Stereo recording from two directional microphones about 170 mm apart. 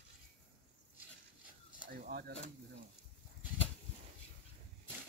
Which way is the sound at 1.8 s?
60° right (ahead or behind).